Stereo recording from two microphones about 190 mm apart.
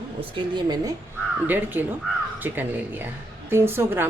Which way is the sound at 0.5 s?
20° right (ahead or behind).